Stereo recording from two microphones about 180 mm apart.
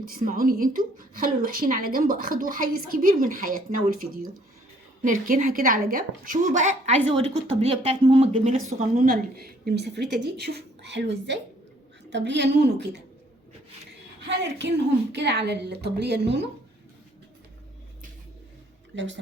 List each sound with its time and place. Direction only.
0.0 s a woman's voice: 50° right (ahead or behind); by 8.5 s 30° right (ahead or behind)
9.0 s a woman's voice: 55° right (ahead or behind)
14.3 s a woman's voice: 75° right (ahead or behind)
18.9 s speech: 90° right